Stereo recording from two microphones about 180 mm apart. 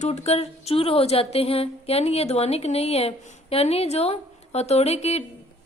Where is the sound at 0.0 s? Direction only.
35° left (ahead or behind).